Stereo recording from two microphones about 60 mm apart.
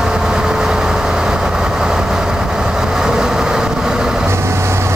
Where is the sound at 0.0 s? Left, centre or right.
Centre.